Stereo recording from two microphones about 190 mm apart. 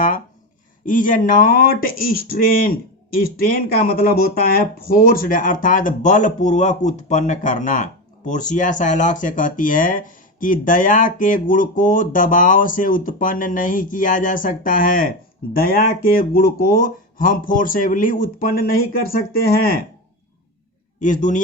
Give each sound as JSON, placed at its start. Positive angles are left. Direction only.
{"t": 0.9, "sound": "speech", "side_deg": 45}
{"t": 21.0, "sound": "speech", "side_deg": 45}